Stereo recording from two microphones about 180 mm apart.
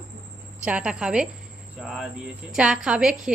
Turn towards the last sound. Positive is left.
turn(degrees=-5)  # may be behind; listen again after turning